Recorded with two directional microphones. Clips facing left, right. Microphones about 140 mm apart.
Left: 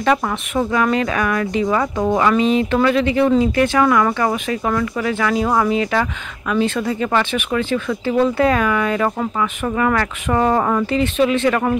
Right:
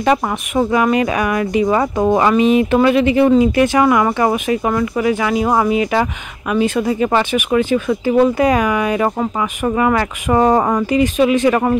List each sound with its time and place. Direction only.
0.0 s speech: 20° right (ahead or behind)